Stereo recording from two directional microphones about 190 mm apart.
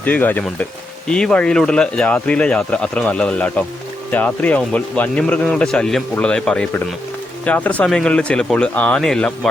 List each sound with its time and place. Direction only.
0.0 s speech: 10° left (ahead or behind)